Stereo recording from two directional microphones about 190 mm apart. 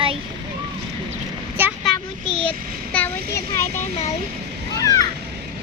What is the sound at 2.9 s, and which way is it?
Speech, 10° left (ahead or behind).